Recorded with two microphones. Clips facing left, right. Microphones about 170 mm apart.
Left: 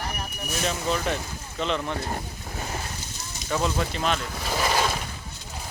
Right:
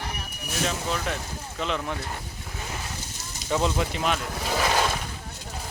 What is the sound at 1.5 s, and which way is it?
Speech, 5° right (ahead or behind).